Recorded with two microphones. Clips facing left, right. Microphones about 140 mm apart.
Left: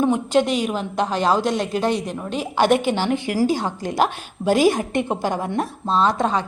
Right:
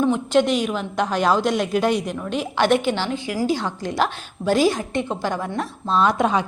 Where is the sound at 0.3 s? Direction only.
5° left (ahead or behind).